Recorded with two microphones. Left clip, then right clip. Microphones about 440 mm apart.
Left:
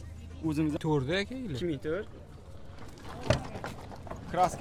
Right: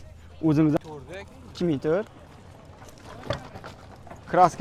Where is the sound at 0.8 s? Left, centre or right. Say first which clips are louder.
Left 9 dB; left.